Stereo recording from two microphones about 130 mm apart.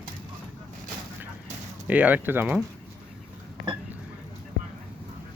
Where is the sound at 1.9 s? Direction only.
10° right (ahead or behind).